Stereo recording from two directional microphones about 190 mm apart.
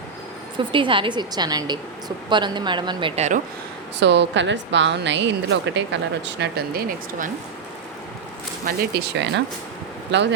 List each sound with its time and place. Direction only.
0.5 s a woman's voice: 25° right (ahead or behind)
3.2 s speech: 40° right (ahead or behind)
4.0 s a woman's voice: 65° right (ahead or behind)
8.6 s speech: 60° right (ahead or behind)